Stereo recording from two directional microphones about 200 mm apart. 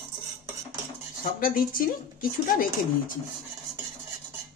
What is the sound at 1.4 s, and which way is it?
Speech, 45° left (ahead or behind).